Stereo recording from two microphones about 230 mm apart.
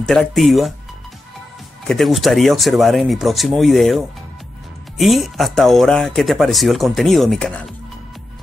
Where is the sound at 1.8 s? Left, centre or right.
Centre.